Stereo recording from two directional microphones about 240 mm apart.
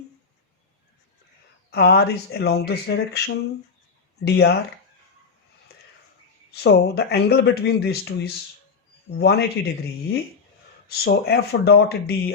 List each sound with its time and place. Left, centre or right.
1.7 s speech: left
4.2 s speech: left
6.5 s speech: left